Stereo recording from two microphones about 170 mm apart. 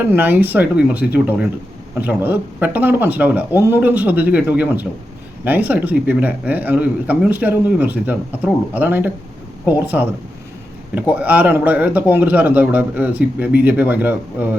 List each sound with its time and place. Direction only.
0.1 s a man's voice: 10° right (ahead or behind)
11.1 s a man's voice: 10° right (ahead or behind)